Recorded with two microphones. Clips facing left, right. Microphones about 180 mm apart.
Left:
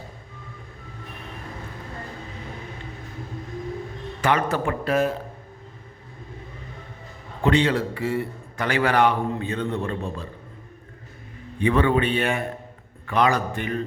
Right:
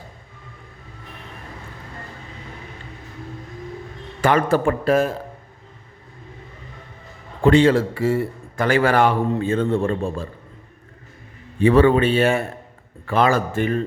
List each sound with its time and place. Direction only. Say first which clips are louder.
4.2 s a man's voice: right 5 dB; 50° right (ahead or behind)
7.4 s a man's voice: right 6 dB; 45° right (ahead or behind)
11.6 s a man's voice: right 6 dB; 40° right (ahead or behind)